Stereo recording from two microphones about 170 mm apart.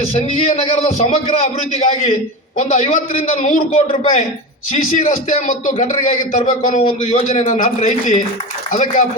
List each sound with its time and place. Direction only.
0.0 s a man's voice: 35° left (ahead or behind)